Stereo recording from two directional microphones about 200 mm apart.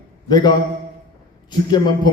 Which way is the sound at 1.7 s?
20° left (ahead or behind).